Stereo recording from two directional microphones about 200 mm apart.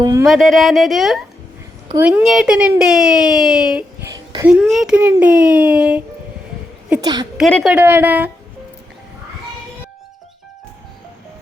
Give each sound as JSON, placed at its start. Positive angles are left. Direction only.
{"t": 0.0, "sound": "speech", "side_deg": -15}
{"t": 0.3, "sound": "speech", "side_deg": 0}
{"t": 7.0, "sound": "a woman's voice", "side_deg": -20}
{"t": 7.3, "sound": "speech", "side_deg": 0}